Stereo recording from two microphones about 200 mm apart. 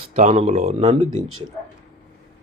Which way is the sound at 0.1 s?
35° right (ahead or behind).